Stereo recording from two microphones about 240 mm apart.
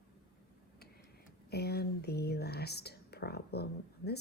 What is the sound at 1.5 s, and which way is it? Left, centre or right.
Speech, left.